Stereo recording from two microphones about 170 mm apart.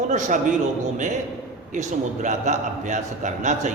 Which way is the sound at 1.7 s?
45° right (ahead or behind).